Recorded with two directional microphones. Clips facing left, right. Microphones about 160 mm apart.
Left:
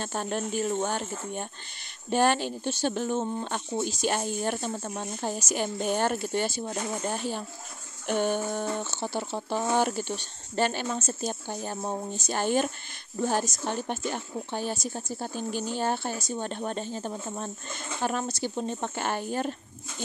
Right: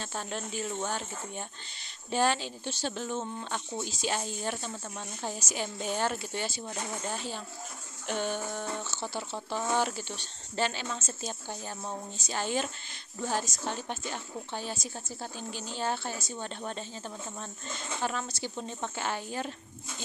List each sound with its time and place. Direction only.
0.0 s speech: 50° left (ahead or behind)
12.1 s speech: 55° left (ahead or behind)